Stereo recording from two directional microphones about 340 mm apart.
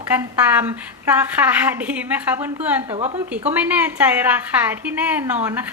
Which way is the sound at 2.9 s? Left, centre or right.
Centre.